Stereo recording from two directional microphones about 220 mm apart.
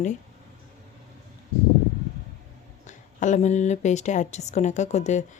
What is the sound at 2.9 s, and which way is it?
Speech, 35° left (ahead or behind).